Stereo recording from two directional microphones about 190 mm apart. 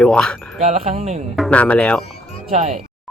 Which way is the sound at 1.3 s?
5° left (ahead or behind).